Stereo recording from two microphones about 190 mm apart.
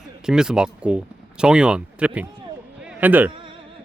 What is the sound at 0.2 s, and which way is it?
Speech, 5° right (ahead or behind).